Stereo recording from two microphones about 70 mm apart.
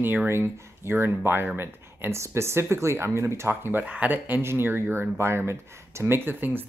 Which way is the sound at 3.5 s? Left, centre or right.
Right.